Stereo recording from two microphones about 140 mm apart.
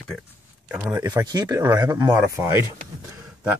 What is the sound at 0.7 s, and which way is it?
Speech, 15° right (ahead or behind).